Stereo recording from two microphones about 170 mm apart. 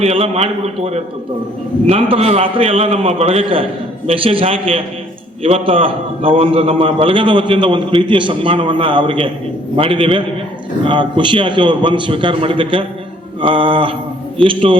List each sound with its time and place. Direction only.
0.0 s a man's voice: 35° right (ahead or behind)